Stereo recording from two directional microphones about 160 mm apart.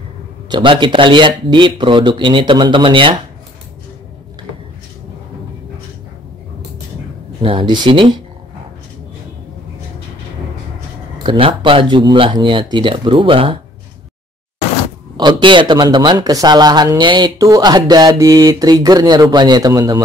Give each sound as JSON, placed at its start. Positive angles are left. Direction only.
{"t": 0.5, "sound": "speech", "side_deg": -30}
{"t": 7.4, "sound": "speech", "side_deg": -30}
{"t": 11.2, "sound": "speech", "side_deg": -35}
{"t": 15.1, "sound": "speech", "side_deg": -30}